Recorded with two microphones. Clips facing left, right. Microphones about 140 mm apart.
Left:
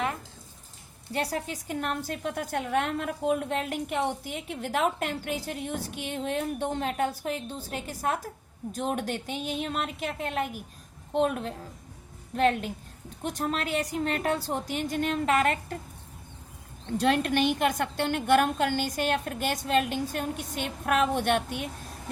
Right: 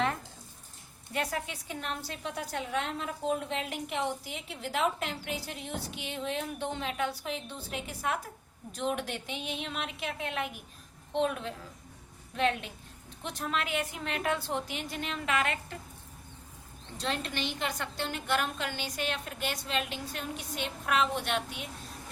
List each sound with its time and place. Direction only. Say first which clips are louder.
1.1 s a woman's voice: left 3 dB; 35° left (ahead or behind)
17.0 s a woman's voice: left 10 dB; 55° left (ahead or behind)